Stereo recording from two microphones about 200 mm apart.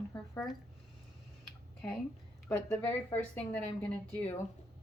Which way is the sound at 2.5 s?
10° left (ahead or behind).